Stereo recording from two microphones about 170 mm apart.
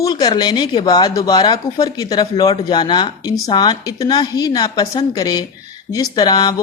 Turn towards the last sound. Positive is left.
turn(degrees=20)  # may be behind; listen again after turning